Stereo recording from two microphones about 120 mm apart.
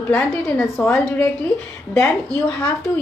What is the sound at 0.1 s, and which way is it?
A woman's voice, 15° left (ahead or behind).